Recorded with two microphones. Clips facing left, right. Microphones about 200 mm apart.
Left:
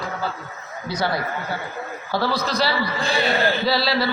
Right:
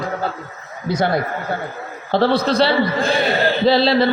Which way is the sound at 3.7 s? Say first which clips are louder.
Right 7 dB; 25° right (ahead or behind).